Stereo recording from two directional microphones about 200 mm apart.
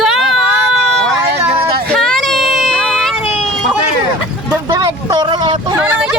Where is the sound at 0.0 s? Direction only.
Centre (ahead or behind).